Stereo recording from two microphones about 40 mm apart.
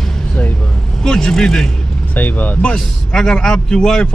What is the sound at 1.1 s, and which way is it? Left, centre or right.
Speech, centre.